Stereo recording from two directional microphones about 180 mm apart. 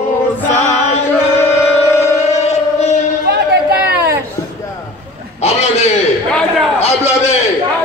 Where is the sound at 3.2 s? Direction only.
60° right (ahead or behind).